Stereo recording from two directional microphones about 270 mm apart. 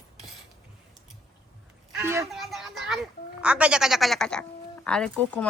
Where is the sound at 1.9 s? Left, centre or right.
Centre.